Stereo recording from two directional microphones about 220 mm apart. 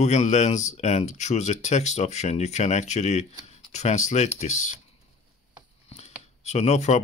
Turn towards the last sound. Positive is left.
turn(degrees=30)  # may be behind; listen again after turning